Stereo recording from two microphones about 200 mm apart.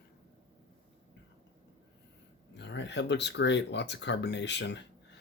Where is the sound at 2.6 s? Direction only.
60° left (ahead or behind).